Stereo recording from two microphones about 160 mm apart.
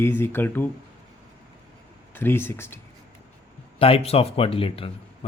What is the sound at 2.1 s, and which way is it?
Speech, 15° left (ahead or behind).